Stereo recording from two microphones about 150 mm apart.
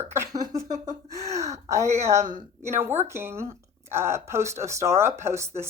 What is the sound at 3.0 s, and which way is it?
A woman's voice, 15° right (ahead or behind).